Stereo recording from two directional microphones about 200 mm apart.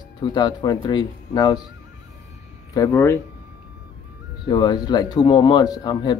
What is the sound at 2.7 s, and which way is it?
Speech, 15° left (ahead or behind).